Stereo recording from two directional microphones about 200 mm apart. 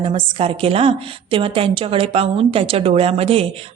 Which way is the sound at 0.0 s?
30° right (ahead or behind).